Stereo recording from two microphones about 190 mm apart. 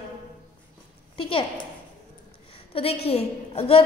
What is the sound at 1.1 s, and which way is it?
Speech, 30° left (ahead or behind).